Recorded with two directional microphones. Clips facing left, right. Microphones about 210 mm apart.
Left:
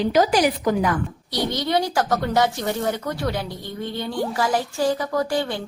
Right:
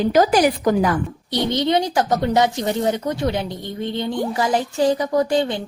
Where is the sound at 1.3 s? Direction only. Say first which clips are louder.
Right 5 dB; 20° right (ahead or behind).